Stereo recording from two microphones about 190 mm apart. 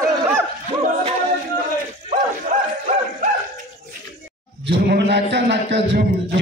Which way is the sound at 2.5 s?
35° right (ahead or behind).